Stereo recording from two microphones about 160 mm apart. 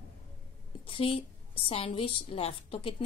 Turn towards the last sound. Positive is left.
turn(degrees=35)  # may be behind; listen again after turning